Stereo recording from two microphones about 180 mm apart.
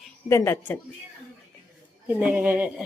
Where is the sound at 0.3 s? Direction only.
15° left (ahead or behind).